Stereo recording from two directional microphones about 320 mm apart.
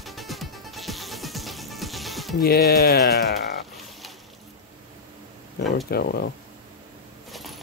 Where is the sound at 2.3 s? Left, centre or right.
Left.